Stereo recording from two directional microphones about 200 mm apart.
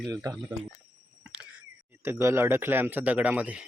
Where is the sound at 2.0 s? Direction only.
10° right (ahead or behind).